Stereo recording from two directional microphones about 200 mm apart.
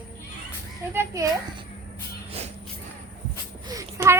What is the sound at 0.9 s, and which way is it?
Speech, 15° right (ahead or behind).